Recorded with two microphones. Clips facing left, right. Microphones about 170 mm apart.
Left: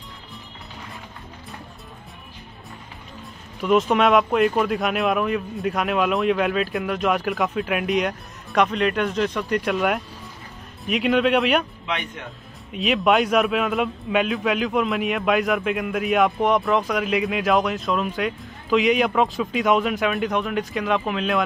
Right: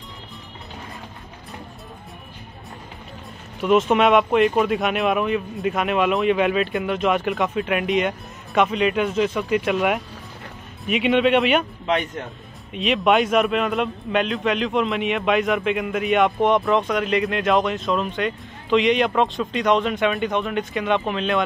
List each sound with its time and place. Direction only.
3.6 s speech: centre (ahead or behind)
11.8 s a man's voice: 40° right (ahead or behind)
12.7 s speech: centre (ahead or behind)